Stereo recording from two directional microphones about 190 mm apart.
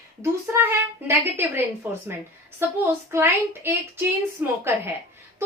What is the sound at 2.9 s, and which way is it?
Speech, 10° right (ahead or behind).